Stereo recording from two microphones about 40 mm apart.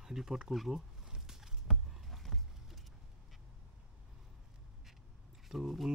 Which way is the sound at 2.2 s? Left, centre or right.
Centre.